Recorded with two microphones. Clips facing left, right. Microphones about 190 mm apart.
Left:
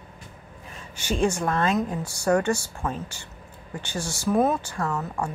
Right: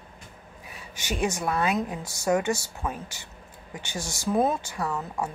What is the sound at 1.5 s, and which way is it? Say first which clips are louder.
Speech: left 2 dB; 10° right (ahead or behind).